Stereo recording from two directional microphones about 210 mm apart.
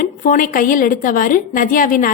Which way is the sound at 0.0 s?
40° left (ahead or behind).